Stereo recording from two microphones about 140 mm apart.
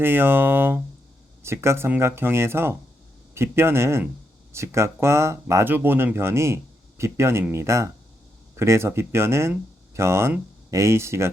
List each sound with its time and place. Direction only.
0.0 s speech: 15° right (ahead or behind)